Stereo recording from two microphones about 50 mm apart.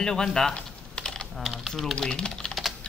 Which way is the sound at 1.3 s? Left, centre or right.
Centre.